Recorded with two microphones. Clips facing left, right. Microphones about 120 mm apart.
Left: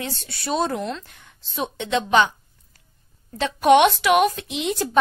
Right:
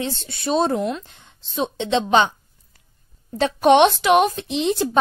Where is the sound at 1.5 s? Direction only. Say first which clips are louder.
Right 3 dB; 25° right (ahead or behind).